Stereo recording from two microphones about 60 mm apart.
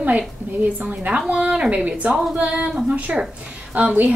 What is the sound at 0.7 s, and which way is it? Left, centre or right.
Speech, right.